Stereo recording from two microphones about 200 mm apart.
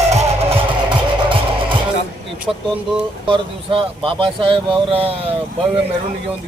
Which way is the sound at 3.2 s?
25° right (ahead or behind).